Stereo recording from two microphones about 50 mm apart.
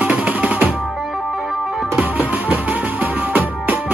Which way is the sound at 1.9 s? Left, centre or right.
Right.